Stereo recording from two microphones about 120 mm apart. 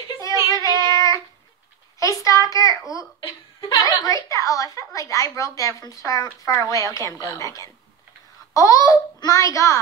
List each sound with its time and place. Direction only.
0.5 s child singing: 25° left (ahead or behind)
3.2 s a child's voice: 35° left (ahead or behind)